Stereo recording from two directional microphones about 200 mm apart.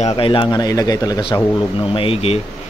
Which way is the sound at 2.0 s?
30° left (ahead or behind).